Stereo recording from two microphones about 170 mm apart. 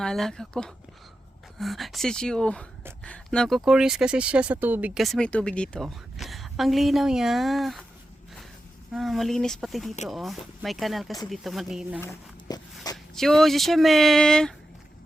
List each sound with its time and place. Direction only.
0.0 s speech: 5° left (ahead or behind)
8.9 s speech: centre (ahead or behind)
11.9 s speech: 15° left (ahead or behind)
13.1 s speech: centre (ahead or behind)